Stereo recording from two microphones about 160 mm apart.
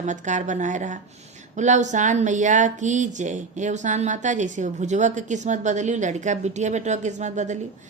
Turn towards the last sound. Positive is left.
turn(degrees=-45)  # may be behind; listen again after turning